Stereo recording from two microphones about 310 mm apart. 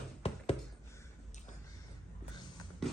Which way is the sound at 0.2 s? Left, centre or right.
Centre.